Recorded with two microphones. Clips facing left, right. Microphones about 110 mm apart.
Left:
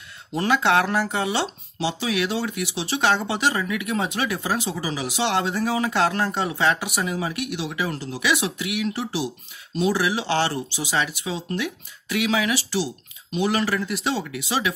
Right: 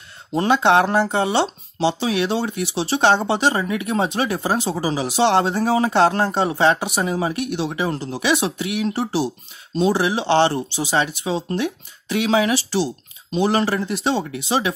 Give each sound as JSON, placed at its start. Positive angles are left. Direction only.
{"t": 0.3, "sound": "speech", "side_deg": -25}